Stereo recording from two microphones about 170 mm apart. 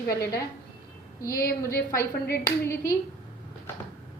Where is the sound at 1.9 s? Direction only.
15° left (ahead or behind).